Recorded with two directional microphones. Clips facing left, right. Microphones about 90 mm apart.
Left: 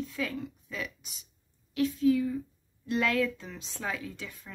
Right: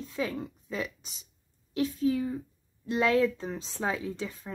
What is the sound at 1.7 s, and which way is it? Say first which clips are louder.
A woman's voice: left 2 dB; 35° right (ahead or behind).